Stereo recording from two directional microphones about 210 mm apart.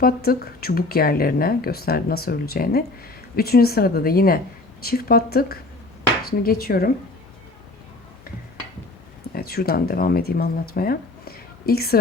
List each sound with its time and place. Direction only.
0.0 s speech: 45° left (ahead or behind)
9.3 s speech: 45° left (ahead or behind)